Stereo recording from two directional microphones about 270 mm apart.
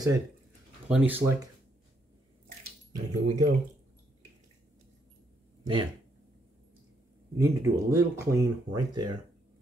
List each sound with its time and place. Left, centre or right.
0.8 s speech: centre
3.1 s speech: right
5.6 s speech: centre
7.3 s speech: centre